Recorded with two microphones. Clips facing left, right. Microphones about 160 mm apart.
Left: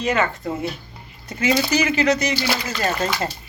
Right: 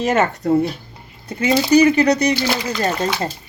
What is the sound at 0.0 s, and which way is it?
Speech, 45° right (ahead or behind).